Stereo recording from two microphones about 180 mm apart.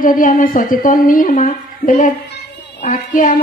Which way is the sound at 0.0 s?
50° left (ahead or behind).